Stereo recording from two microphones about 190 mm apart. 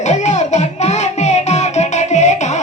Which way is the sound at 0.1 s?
40° left (ahead or behind).